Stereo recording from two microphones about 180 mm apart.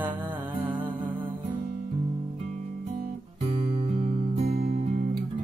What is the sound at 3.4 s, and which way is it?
Music, 30° right (ahead or behind).